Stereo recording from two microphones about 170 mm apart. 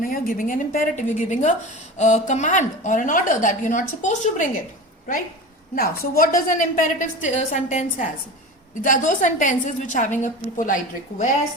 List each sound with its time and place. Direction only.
0.0 s a woman's voice: 55° left (ahead or behind)
5.7 s a woman's voice: 60° left (ahead or behind)